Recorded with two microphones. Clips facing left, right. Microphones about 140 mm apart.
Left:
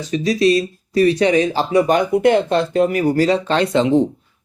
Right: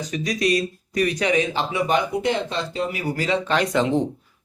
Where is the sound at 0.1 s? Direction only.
30° left (ahead or behind); by 3.0 s 50° left (ahead or behind).